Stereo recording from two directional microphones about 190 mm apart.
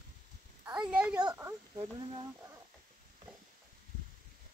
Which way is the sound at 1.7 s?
25° right (ahead or behind).